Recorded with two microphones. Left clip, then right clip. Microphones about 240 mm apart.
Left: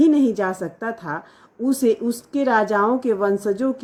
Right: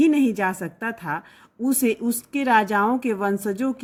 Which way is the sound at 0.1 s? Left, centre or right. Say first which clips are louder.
Left 2 dB; right.